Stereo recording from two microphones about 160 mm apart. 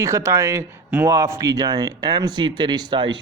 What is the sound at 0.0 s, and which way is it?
Speech, 20° right (ahead or behind).